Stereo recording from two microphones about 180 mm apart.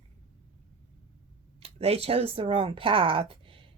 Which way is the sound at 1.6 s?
35° right (ahead or behind).